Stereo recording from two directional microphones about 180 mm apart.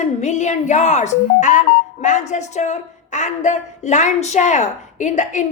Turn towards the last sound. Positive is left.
turn(degrees=40)  # may be behind; listen again after turning